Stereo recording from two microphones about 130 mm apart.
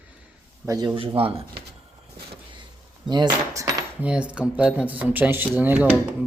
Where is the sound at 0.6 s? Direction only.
25° right (ahead or behind).